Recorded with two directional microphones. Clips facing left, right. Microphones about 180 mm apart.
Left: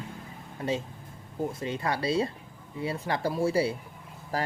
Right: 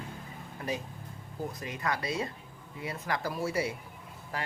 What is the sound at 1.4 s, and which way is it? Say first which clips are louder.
Speech: left 5 dB; 25° left (ahead or behind).